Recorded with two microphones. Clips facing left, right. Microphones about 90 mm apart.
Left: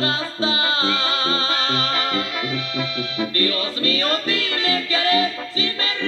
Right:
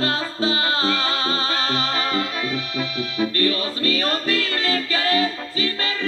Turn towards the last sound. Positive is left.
turn(degrees=-35)  # may be behind; listen again after turning